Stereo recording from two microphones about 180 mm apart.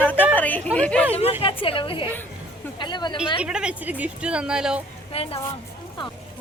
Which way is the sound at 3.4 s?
5° right (ahead or behind).